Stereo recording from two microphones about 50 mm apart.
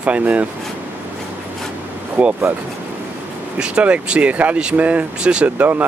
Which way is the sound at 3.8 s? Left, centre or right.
Right.